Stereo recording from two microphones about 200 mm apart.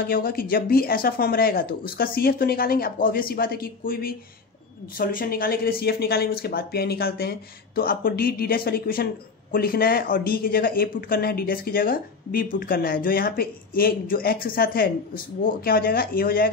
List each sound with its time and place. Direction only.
0.0 s speech: 45° left (ahead or behind)